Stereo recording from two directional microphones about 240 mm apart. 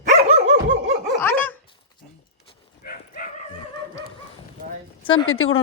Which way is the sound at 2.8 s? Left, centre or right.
Left.